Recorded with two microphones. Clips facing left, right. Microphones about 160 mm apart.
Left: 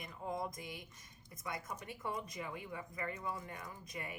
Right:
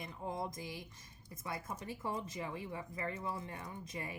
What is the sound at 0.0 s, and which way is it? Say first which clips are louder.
A woman's voice: even; 25° right (ahead or behind).